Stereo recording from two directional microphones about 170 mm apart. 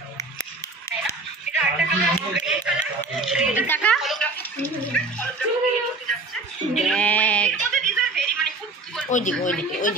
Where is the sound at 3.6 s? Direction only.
10° left (ahead or behind).